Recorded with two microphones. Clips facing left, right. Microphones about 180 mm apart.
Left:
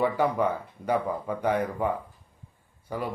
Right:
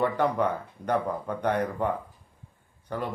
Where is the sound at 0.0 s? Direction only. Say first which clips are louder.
Even; 5° left (ahead or behind).